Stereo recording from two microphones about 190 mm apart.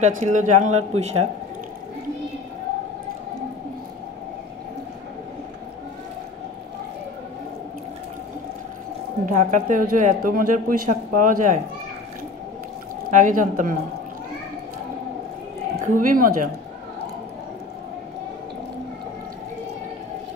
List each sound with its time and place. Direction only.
0.2 s speech: 40° right (ahead or behind)
9.2 s a woman's voice: 40° right (ahead or behind)
13.1 s a woman's voice: 45° right (ahead or behind)
15.8 s a woman's voice: 45° right (ahead or behind)